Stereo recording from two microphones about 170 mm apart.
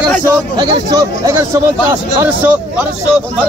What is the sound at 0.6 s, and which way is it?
Speech, 25° right (ahead or behind).